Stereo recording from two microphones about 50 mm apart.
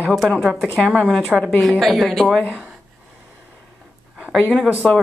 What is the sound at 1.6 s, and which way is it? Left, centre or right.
Speech, centre.